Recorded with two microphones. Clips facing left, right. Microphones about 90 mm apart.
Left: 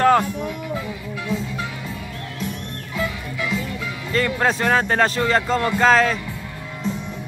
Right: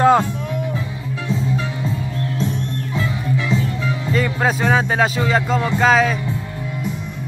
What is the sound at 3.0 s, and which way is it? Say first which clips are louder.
Music: right 3 dB; 30° right (ahead or behind).